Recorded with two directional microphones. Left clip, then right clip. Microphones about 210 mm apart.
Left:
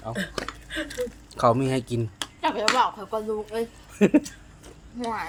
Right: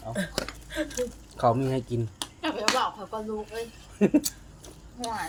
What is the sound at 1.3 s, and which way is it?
Speech, 15° left (ahead or behind).